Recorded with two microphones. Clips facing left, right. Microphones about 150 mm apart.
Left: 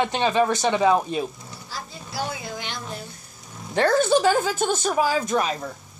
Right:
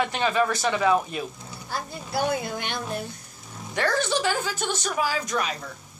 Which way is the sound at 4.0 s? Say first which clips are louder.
Left 7 dB; 45° left (ahead or behind).